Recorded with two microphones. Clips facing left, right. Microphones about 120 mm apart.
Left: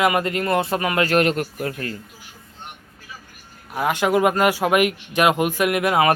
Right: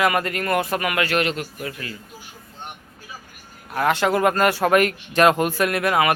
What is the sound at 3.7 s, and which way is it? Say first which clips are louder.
Speech: even; 15° left (ahead or behind).